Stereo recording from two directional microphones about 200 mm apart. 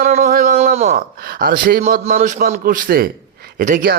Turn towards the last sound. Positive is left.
turn(degrees=-45)  # may be behind; listen again after turning